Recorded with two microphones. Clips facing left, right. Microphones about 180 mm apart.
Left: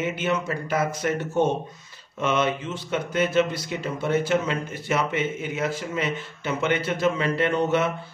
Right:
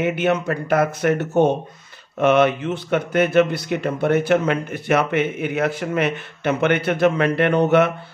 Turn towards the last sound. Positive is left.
turn(degrees=-65)  # may be behind; listen again after turning